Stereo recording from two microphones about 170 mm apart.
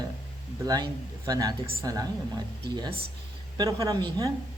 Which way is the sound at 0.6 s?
20° right (ahead or behind).